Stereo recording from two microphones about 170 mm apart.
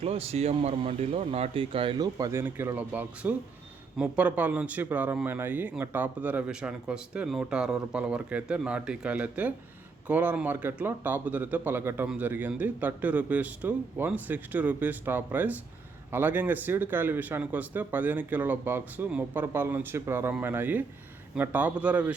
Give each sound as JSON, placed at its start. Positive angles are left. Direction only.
{"t": 0.0, "sound": "a man's voice", "side_deg": -35}